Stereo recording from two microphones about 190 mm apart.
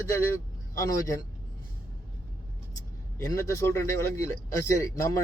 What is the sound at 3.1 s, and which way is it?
A man's voice, 15° left (ahead or behind).